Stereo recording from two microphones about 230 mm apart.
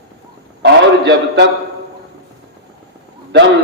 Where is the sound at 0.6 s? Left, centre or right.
Right.